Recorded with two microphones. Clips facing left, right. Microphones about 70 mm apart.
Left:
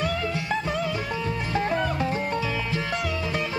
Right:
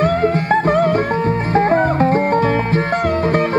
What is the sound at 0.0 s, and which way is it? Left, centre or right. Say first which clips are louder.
Music: right 12 dB; right.